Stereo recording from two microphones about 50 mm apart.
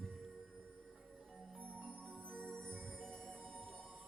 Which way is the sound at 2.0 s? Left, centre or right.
Left.